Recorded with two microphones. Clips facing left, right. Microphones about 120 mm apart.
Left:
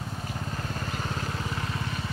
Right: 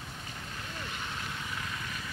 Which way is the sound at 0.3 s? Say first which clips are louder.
Left 8 dB; 45° left (ahead or behind).